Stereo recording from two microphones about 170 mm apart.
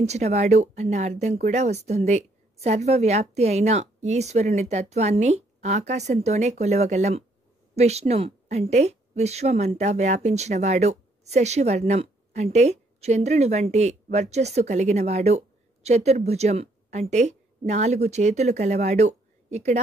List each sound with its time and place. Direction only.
0.0 s a woman's voice: 40° right (ahead or behind)